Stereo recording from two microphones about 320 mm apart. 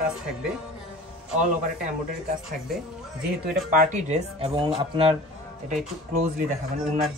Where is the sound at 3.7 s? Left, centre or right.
Right.